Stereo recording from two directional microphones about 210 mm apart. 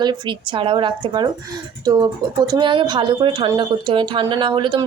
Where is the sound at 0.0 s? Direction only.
20° right (ahead or behind).